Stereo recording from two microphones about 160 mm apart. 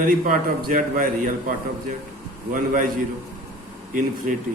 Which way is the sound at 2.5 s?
55° right (ahead or behind).